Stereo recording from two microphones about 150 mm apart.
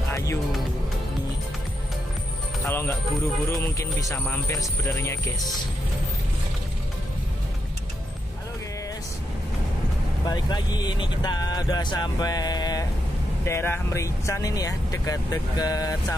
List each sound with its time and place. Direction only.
0.1 s music: 20° left (ahead or behind)
2.6 s music: 15° left (ahead or behind)
3.4 s speech: 20° left (ahead or behind)
4.2 s music: 10° left (ahead or behind)
10.2 s speech: 25° left (ahead or behind)